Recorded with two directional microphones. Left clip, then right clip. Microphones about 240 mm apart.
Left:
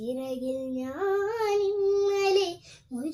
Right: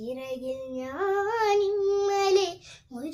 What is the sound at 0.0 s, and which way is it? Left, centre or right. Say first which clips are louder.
Child singing: left 1 dB; centre.